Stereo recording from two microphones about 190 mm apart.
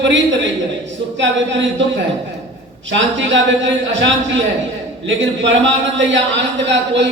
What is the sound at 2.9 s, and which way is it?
A man's voice, 75° right (ahead or behind).